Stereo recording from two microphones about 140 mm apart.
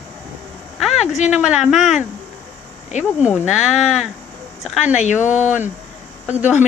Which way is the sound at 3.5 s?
5° right (ahead or behind).